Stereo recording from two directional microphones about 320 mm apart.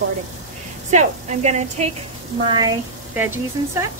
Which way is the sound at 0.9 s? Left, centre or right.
Right.